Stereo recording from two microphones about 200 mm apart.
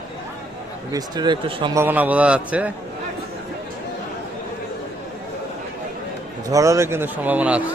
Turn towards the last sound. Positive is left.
turn(degrees=-5)  # may be behind; listen again after turning